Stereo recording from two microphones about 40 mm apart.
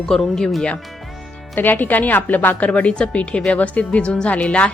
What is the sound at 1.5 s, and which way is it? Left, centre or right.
A woman's voice, left.